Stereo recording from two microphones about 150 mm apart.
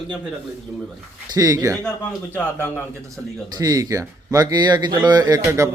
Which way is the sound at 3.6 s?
25° right (ahead or behind).